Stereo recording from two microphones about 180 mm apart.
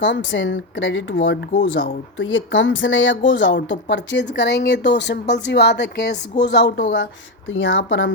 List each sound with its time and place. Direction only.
0.0 s speech: 90° left; by 6.8 s 70° left (ahead or behind)
6.9 s speech: 90° left